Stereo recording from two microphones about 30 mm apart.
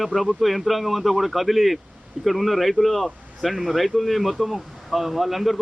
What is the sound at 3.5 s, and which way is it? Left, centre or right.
Speech, centre.